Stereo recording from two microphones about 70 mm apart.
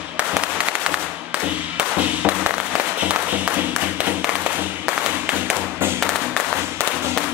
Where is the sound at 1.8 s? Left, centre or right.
Right.